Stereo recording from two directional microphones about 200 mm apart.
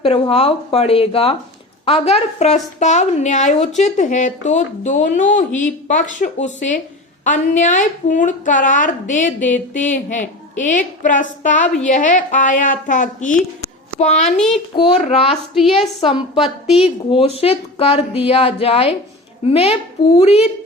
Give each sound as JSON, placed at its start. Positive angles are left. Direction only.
{"t": 0.0, "sound": "a woman's voice", "side_deg": 30}
{"t": 14.3, "sound": "a child's voice", "side_deg": 5}
{"t": 14.8, "sound": "a woman's voice", "side_deg": 30}